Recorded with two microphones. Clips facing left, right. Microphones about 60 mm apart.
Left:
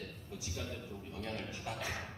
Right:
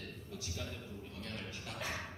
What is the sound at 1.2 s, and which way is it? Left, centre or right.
Speech, centre.